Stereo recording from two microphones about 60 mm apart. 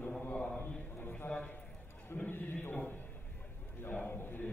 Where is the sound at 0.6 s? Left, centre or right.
Left.